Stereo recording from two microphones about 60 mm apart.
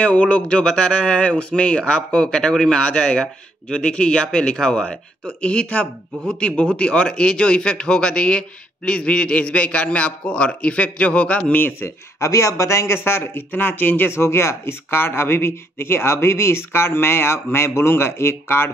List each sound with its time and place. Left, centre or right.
0.0 s a man's voice: centre
11.5 s speech: left
12.2 s speech: left